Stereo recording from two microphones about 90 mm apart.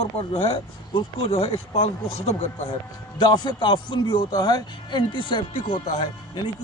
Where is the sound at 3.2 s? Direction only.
55° left (ahead or behind).